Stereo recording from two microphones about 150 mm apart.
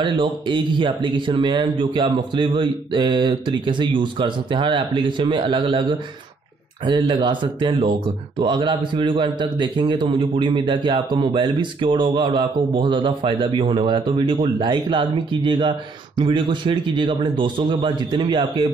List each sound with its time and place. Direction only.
0.0 s speech: 30° right (ahead or behind)